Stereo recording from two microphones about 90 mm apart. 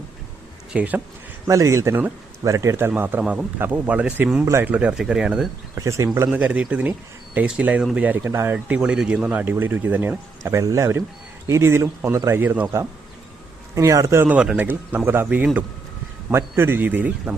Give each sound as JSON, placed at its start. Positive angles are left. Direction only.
{"t": 0.7, "sound": "speech", "side_deg": -15}
{"t": 1.5, "sound": "speech", "side_deg": -35}
{"t": 2.9, "sound": "speech", "side_deg": -20}
{"t": 5.7, "sound": "speech", "side_deg": -35}
{"t": 6.3, "sound": "speech", "side_deg": -15}
{"t": 8.3, "sound": "speech", "side_deg": -30}
{"t": 8.5, "sound": "speech", "side_deg": -15}
{"t": 13.7, "sound": "speech", "side_deg": -35}
{"t": 14.3, "sound": "speech", "side_deg": -10}
{"t": 14.6, "sound": "speech", "side_deg": -20}